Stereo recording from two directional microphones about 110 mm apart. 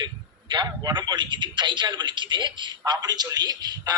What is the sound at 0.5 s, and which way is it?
A man's voice, 40° right (ahead or behind).